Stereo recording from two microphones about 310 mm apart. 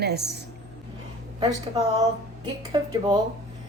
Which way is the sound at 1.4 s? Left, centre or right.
Centre.